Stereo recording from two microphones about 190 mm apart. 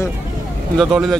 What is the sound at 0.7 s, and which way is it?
Speech, centre (ahead or behind).